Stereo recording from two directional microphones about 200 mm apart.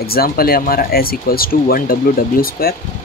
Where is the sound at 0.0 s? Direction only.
50° left (ahead or behind).